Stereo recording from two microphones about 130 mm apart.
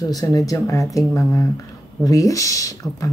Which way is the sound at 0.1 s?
25° left (ahead or behind).